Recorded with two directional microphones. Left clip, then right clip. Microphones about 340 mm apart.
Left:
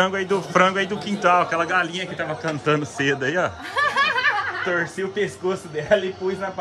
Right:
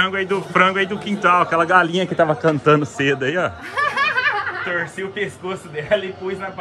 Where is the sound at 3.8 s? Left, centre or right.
Left.